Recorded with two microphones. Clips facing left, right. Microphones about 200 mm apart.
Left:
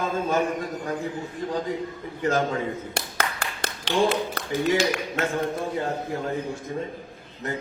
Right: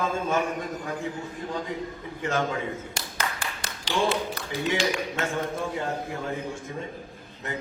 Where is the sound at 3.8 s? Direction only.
65° left (ahead or behind).